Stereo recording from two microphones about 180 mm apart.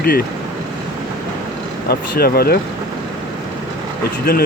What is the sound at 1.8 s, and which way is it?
Speech, 60° left (ahead or behind).